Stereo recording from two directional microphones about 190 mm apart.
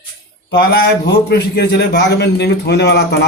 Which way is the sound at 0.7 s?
60° left (ahead or behind).